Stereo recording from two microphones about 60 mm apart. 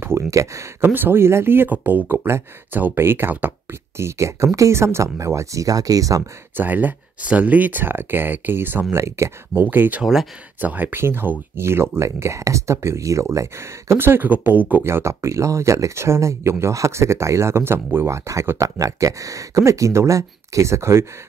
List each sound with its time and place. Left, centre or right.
0.3 s speech: right
0.7 s speech: right
2.2 s speech: right
3.9 s speech: right
6.5 s speech: right
8.9 s speech: right
9.6 s speech: right
14.8 s speech: right
18.8 s speech: right